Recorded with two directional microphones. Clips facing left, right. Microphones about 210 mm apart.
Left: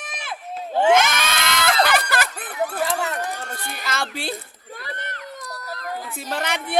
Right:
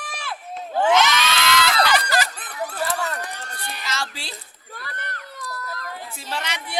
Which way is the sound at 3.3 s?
45° left (ahead or behind).